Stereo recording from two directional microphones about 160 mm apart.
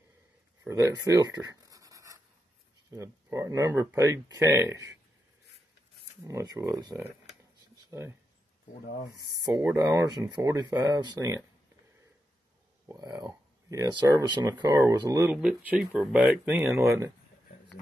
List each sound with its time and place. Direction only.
0.7 s writing: 20° right (ahead or behind)
2.9 s speech: 20° right (ahead or behind)
6.2 s speech: 20° right (ahead or behind)
7.7 s a sound: 15° right (ahead or behind)
9.1 s speech: 20° right (ahead or behind)
12.9 s speech: 25° right (ahead or behind)
15.3 s speech: 5° right (ahead or behind)